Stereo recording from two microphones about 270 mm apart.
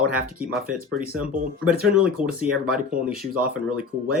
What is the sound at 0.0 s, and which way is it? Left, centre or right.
Speech, centre.